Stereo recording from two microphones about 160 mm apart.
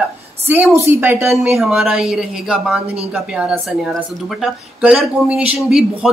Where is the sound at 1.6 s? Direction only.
Centre (ahead or behind).